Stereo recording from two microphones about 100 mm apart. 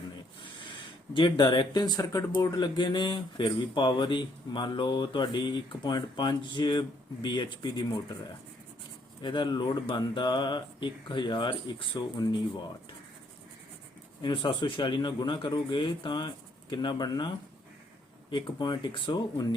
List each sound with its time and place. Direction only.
1.1 s speech: 50° left (ahead or behind)
14.2 s speech: 50° left (ahead or behind)